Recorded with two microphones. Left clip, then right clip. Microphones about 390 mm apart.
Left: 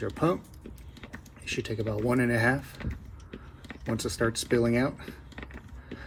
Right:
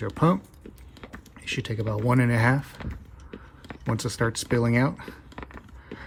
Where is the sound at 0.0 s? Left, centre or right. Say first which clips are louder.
Right 3 dB; centre.